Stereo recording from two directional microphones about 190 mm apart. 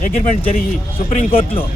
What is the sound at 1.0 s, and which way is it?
Speech, 40° left (ahead or behind).